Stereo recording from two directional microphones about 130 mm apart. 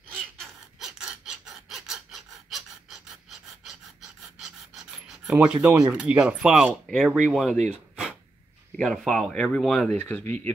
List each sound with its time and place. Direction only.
0.2 s a sound: centre (ahead or behind)
4.4 s pant: 5° right (ahead or behind)
5.9 s speech: 10° right (ahead or behind)
7.5 s speech: 60° right (ahead or behind)
7.9 s a sound: 10° right (ahead or behind)
8.7 s speech: 5° left (ahead or behind)